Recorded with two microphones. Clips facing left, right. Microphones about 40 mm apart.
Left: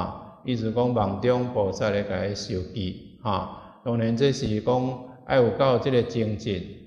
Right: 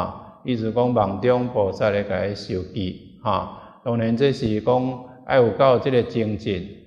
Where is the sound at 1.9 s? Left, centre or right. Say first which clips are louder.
Right 4 dB; centre.